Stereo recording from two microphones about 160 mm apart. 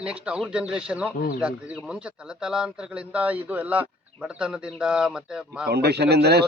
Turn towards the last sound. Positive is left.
turn(degrees=-90)